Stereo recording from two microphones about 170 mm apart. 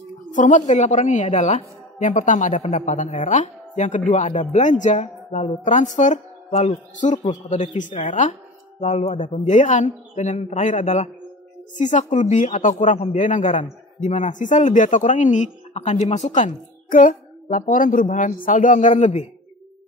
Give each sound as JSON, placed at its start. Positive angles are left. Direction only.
{"t": 0.3, "sound": "a woman's voice", "side_deg": 50}